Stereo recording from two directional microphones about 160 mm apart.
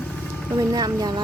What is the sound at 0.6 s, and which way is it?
Speech, 25° right (ahead or behind).